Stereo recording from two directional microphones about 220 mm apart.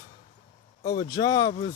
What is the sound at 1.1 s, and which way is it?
Speech, 15° left (ahead or behind).